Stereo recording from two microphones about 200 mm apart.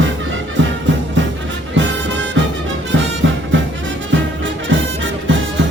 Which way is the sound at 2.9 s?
65° right (ahead or behind).